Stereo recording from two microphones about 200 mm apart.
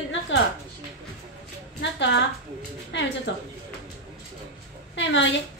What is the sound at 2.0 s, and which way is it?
A woman's voice, 65° left (ahead or behind).